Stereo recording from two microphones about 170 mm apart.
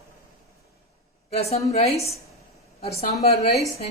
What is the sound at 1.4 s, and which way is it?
Speech, 35° left (ahead or behind).